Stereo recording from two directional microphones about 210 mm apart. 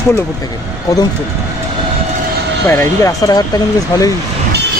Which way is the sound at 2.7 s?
10° left (ahead or behind).